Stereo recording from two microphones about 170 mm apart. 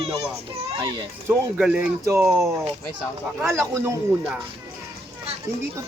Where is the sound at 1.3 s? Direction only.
5° right (ahead or behind).